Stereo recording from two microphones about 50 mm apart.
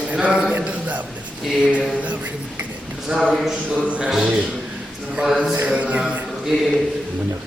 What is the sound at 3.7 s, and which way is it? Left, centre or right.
Speech, right.